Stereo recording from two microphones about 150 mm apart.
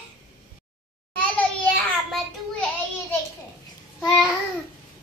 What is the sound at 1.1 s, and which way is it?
Child singing, 10° left (ahead or behind).